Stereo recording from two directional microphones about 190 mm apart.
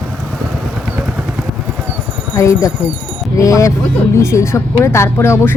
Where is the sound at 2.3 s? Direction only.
15° left (ahead or behind).